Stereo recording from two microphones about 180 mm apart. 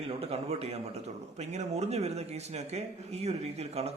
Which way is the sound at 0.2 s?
35° right (ahead or behind).